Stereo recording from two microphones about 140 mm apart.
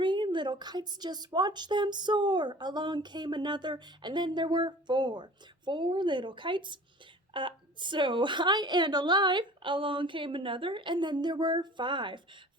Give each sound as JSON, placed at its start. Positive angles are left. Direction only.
{"t": 0.0, "sound": "a woman's voice", "side_deg": -35}